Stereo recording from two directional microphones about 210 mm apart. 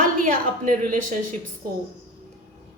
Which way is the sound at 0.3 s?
40° right (ahead or behind).